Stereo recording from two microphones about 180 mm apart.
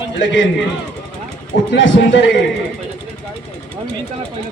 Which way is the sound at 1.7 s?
90° left.